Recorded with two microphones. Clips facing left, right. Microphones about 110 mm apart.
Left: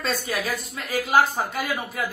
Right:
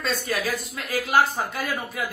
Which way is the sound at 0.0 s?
Centre (ahead or behind).